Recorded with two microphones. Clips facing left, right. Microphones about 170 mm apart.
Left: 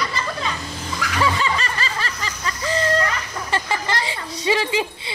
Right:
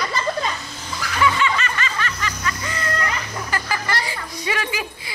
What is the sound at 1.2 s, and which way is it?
Snicker, 35° left (ahead or behind).